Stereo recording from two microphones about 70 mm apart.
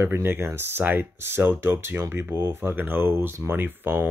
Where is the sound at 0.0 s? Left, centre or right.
Right.